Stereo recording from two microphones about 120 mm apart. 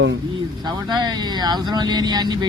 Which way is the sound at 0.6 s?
35° right (ahead or behind).